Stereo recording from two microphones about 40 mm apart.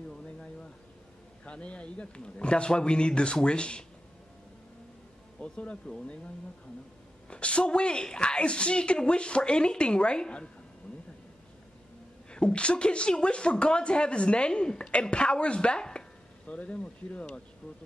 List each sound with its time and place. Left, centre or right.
1.4 s speech: left
5.4 s speech: left
7.2 s speech: left
12.3 s speech: left